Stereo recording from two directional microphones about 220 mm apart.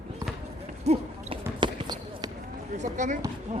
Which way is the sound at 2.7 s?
35° right (ahead or behind).